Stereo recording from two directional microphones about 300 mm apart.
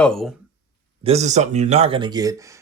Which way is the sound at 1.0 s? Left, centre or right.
Right.